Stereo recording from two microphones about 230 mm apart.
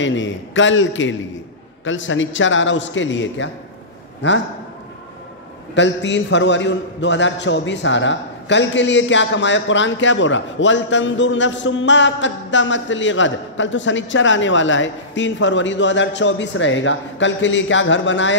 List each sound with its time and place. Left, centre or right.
0.0 s a man's voice: left
5.8 s a man's voice: left